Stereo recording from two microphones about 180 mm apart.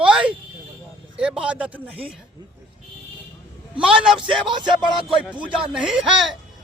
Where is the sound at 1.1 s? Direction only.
5° right (ahead or behind).